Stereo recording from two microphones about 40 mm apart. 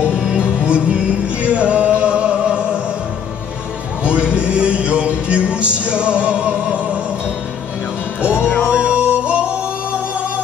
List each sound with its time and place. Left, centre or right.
0.0 s music: right
4.0 s music: right
8.4 s music: left
8.6 s music: right